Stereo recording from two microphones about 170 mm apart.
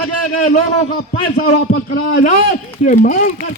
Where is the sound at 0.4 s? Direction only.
45° left (ahead or behind).